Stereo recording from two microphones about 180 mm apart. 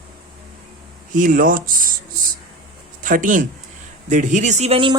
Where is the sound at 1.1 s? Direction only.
50° right (ahead or behind).